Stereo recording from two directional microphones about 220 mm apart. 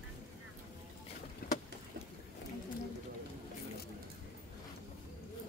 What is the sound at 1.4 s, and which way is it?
Boat, 45° left (ahead or behind).